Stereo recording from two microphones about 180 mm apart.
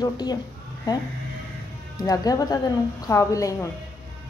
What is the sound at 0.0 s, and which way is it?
Speech, 20° left (ahead or behind).